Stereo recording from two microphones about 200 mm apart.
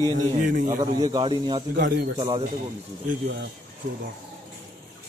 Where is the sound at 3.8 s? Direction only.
40° right (ahead or behind).